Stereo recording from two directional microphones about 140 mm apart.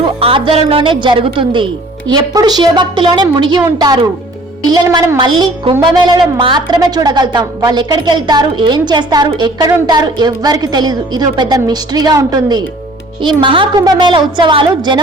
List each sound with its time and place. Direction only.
0.0 s a woman's voice: 40° right (ahead or behind)